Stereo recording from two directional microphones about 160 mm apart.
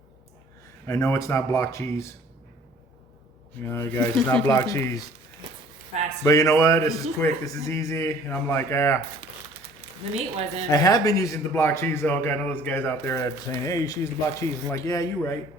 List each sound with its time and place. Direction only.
0.9 s a man's voice: 15° left (ahead or behind)
3.6 s a man's voice: 15° left (ahead or behind)
6.2 s speech: 20° left (ahead or behind)
10.7 s a man's voice: 20° left (ahead or behind)